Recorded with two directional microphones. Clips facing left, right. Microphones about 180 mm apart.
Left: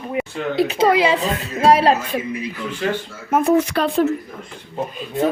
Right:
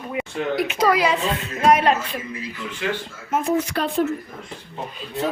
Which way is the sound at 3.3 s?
60° left (ahead or behind).